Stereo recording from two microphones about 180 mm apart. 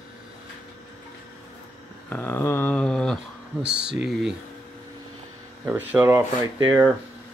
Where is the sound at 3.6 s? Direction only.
70° right (ahead or behind).